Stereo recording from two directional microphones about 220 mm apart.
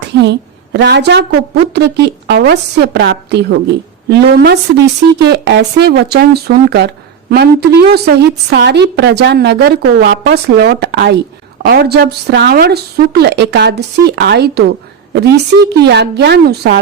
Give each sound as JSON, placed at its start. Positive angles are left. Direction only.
{"t": 0.2, "sound": "speech", "side_deg": -55}
{"t": 15.8, "sound": "speech", "side_deg": -50}